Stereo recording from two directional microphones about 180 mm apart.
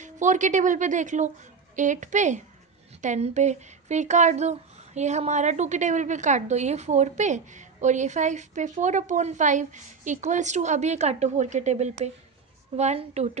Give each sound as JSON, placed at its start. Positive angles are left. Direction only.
{"t": 0.0, "sound": "a woman's voice", "side_deg": -45}